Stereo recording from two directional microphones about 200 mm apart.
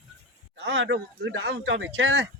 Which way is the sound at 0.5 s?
65° right (ahead or behind).